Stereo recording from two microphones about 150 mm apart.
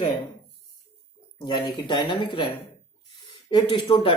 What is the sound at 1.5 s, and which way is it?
Speech, 30° left (ahead or behind).